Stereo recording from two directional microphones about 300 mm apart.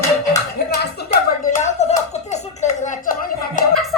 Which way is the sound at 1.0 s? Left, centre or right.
Left.